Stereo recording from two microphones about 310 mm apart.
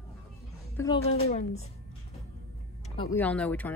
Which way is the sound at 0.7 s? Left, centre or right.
Centre.